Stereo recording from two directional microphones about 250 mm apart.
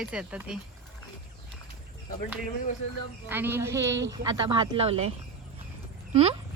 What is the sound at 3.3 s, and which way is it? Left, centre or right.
Speech, centre.